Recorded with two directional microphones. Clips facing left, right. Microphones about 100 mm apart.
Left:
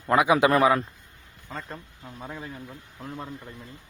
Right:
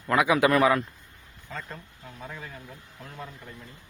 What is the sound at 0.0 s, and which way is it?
Speech, 25° left (ahead or behind).